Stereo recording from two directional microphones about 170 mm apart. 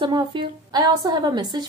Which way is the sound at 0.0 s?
25° right (ahead or behind).